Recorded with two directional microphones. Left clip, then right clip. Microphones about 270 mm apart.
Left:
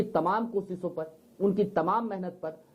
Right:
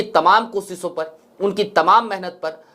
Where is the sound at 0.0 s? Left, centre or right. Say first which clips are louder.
Right 13 dB; centre.